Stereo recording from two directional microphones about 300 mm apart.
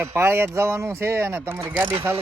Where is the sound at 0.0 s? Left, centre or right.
Centre.